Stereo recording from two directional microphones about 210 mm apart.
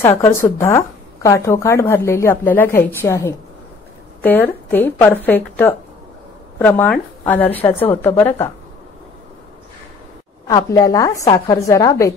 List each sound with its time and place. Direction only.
0.0 s a woman's voice: 15° left (ahead or behind)
10.4 s a woman's voice: 15° left (ahead or behind)